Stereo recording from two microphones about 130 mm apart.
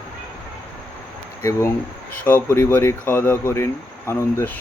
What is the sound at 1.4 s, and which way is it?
Speech, 20° left (ahead or behind).